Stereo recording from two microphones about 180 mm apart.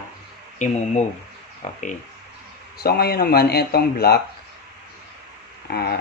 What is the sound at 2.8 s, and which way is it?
Speech, 60° left (ahead or behind).